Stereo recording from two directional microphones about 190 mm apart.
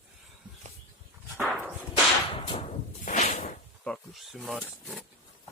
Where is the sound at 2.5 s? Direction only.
30° left (ahead or behind).